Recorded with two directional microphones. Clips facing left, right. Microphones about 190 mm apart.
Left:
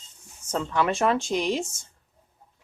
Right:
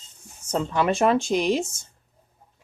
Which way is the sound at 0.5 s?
15° right (ahead or behind).